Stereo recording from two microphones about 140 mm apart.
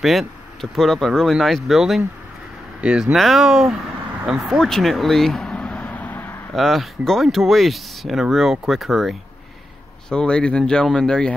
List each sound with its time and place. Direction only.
0.0 s speech: centre (ahead or behind)
4.3 s vehicle: centre (ahead or behind)
6.5 s speech: centre (ahead or behind)